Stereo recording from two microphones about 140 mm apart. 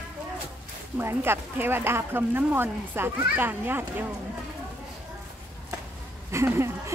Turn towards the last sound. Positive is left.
turn(degrees=-20)  # may be behind; listen again after turning